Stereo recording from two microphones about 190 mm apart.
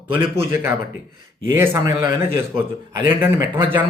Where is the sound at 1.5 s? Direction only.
15° right (ahead or behind).